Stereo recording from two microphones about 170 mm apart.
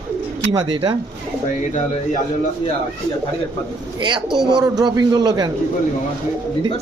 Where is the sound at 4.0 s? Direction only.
25° right (ahead or behind).